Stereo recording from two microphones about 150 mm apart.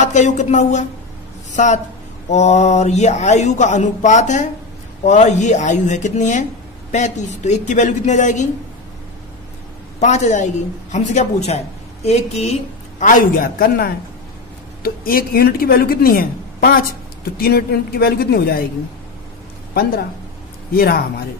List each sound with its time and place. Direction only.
0.0 s a woman's voice: 50° left (ahead or behind)
9.9 s a woman's voice: 50° left (ahead or behind)
13.0 s a woman's voice: 75° left (ahead or behind)
17.2 s speech: 90° left
19.7 s a woman's voice: 90° left